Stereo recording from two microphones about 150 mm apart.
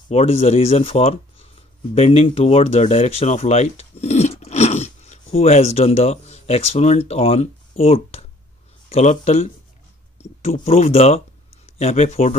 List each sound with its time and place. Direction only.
0.1 s speech: 45° left (ahead or behind)